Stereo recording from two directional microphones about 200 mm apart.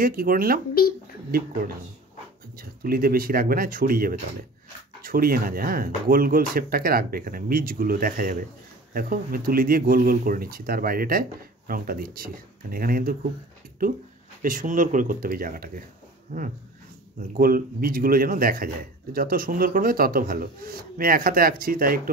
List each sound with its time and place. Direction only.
0.0 s a man's voice: 45° right (ahead or behind)
2.5 s a man's voice: 45° right (ahead or behind)
14.4 s a man's voice: 40° right (ahead or behind)